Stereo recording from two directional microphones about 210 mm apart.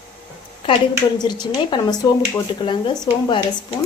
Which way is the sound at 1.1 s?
20° left (ahead or behind).